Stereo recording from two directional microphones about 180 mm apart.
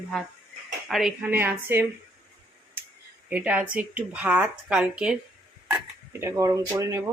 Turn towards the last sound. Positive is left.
turn(degrees=-15)  # may be behind; listen again after turning